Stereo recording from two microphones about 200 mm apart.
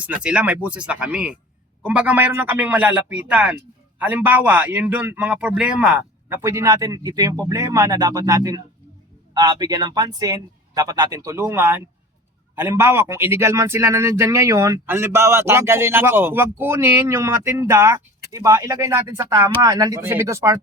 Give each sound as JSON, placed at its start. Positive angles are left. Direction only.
{"t": 0.0, "sound": "a man's voice", "side_deg": -5}